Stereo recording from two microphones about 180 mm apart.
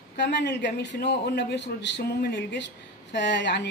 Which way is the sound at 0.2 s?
70° left (ahead or behind).